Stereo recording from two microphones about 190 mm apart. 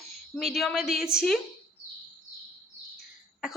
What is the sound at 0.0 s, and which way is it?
A woman's voice, centre (ahead or behind).